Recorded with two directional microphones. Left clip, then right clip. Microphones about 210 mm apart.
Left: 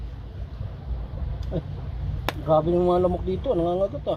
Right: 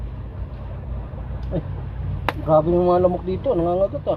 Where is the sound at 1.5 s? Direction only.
40° left (ahead or behind).